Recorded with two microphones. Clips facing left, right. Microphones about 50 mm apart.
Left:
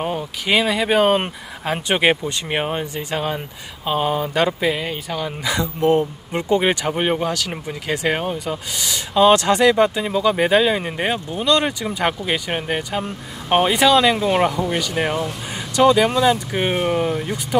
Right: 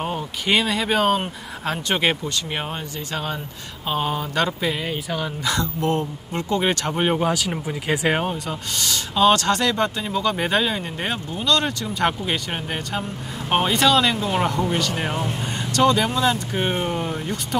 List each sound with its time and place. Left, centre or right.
0.0 s speech: centre
3.8 s speech: centre
5.4 s speech: centre
7.2 s speech: centre
8.5 s speech: centre
15.7 s speech: centre
17.1 s speech: centre